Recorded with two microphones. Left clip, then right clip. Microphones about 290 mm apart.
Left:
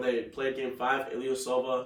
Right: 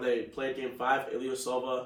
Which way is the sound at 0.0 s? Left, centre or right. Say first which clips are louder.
Left 1 dB; centre.